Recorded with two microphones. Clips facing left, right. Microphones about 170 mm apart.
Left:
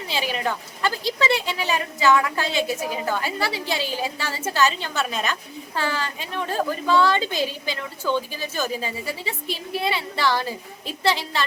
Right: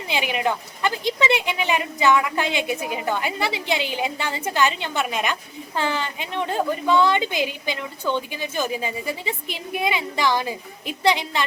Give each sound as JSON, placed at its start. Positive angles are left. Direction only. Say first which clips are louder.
{"t": 0.1, "sound": "a woman's voice", "louder": "right 3 dB", "side_deg": -15}